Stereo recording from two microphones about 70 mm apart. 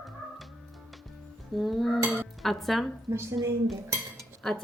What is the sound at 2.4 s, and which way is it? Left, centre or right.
Speech, centre.